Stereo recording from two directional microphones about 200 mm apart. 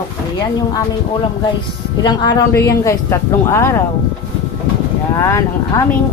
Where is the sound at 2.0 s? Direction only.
20° left (ahead or behind).